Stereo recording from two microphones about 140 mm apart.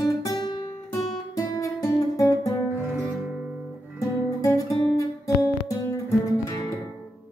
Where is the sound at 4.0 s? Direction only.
25° left (ahead or behind).